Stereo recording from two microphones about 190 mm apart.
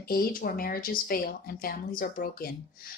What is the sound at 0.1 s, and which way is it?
Speech, 50° left (ahead or behind).